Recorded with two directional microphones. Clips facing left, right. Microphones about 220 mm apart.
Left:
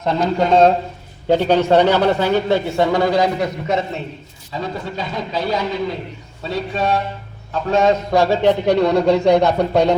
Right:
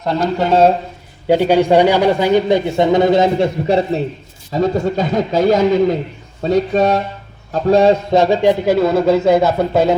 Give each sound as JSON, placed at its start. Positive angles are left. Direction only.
{"t": 0.0, "sound": "a man's voice", "side_deg": 0}
{"t": 4.5, "sound": "a man's voice", "side_deg": -45}
{"t": 8.1, "sound": "speech", "side_deg": -20}